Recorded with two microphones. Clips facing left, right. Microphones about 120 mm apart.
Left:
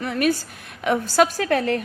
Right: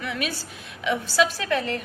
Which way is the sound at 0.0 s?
45° left (ahead or behind).